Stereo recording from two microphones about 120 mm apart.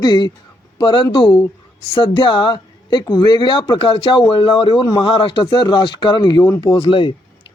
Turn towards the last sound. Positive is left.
turn(degrees=45)  # may be behind; listen again after turning